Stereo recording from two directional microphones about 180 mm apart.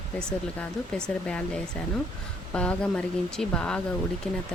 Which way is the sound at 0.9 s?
5° left (ahead or behind).